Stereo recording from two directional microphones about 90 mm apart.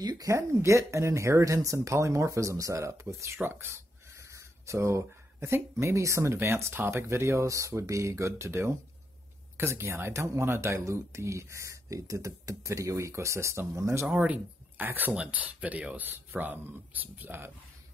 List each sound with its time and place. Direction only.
0.0 s speech: 50° right (ahead or behind)
0.3 s speech: 35° right (ahead or behind)
14.0 s speech: 15° right (ahead or behind)